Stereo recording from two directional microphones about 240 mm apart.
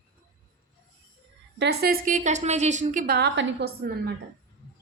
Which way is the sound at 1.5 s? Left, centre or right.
Right.